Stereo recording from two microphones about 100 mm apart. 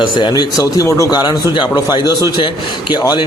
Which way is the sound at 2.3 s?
55° left (ahead or behind).